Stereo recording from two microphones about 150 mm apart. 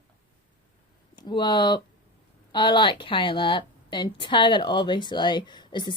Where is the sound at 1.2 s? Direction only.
30° left (ahead or behind).